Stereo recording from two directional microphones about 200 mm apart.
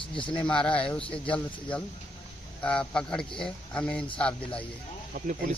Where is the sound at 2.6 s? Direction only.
5° left (ahead or behind).